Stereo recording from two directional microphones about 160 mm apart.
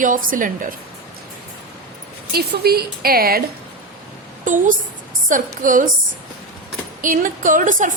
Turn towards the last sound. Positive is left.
turn(degrees=-55)  # may be behind; listen again after turning